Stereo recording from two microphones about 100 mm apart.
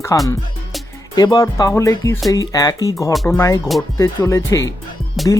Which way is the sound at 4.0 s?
30° left (ahead or behind).